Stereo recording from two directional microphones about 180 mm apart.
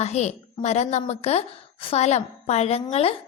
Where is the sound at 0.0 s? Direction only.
35° left (ahead or behind).